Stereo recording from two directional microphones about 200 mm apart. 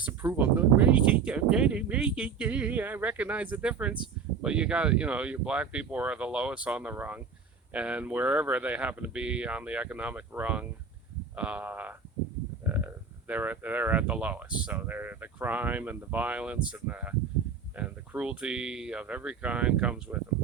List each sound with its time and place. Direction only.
0.0 s speech: 10° right (ahead or behind)